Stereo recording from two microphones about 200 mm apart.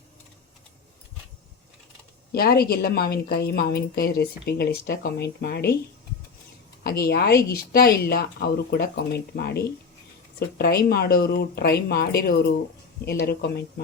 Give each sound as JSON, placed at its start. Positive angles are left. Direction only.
{"t": 2.3, "sound": "a woman's voice", "side_deg": 50}
{"t": 6.8, "sound": "a woman's voice", "side_deg": 50}